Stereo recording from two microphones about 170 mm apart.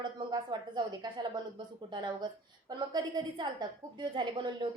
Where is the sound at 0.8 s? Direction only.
30° right (ahead or behind).